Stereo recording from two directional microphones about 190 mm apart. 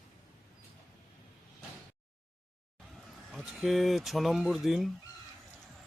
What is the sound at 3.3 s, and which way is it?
Speech, centre (ahead or behind).